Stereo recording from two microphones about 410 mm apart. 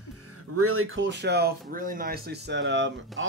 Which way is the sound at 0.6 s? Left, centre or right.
Right.